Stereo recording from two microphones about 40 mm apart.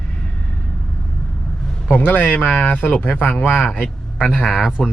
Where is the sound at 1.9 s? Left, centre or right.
Left.